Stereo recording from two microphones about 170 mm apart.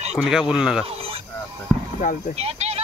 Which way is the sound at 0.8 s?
35° right (ahead or behind).